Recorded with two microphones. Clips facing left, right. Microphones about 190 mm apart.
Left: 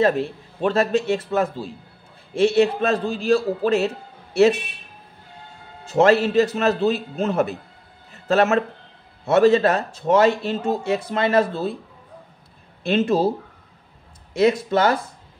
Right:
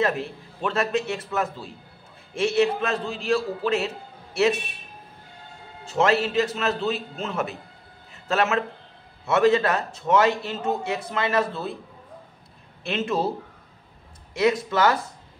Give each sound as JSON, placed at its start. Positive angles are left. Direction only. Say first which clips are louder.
{"t": 0.6, "sound": "a man's voice", "louder": "left 5 dB", "side_deg": 30}
{"t": 5.9, "sound": "a man's voice", "louder": "left 5 dB", "side_deg": 35}
{"t": 12.8, "sound": "a man's voice", "louder": "left 6 dB", "side_deg": 35}
{"t": 14.3, "sound": "speech", "louder": "left 4 dB", "side_deg": 30}